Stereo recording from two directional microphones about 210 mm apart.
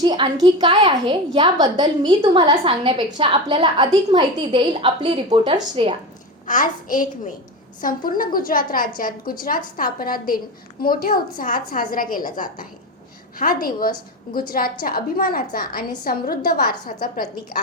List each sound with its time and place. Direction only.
0.0 s a woman's voice: 20° right (ahead or behind)
6.5 s a woman's voice: 40° left (ahead or behind)